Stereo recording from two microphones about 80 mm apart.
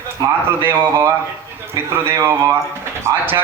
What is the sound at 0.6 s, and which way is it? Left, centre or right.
A man's voice, right.